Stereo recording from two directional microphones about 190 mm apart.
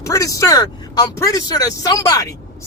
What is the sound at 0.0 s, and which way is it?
Speech, 15° left (ahead or behind).